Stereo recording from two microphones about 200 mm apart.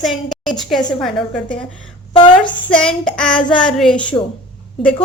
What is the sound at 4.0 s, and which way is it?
Speech, 25° left (ahead or behind).